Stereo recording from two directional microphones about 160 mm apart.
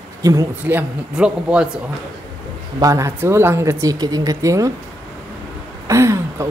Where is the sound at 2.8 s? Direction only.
20° right (ahead or behind).